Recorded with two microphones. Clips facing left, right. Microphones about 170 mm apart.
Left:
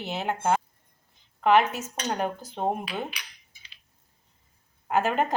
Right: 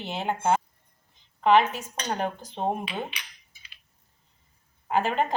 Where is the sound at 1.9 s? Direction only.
10° left (ahead or behind).